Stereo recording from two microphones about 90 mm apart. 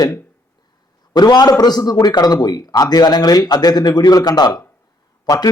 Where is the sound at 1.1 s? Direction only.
50° left (ahead or behind).